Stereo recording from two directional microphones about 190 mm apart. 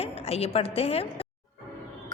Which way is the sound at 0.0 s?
30° left (ahead or behind).